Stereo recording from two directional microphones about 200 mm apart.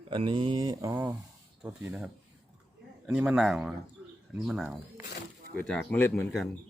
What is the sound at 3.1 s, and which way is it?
Speech, 5° right (ahead or behind).